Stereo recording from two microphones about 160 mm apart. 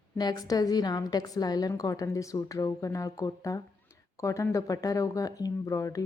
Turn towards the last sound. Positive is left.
turn(degrees=20)  # may be behind; listen again after turning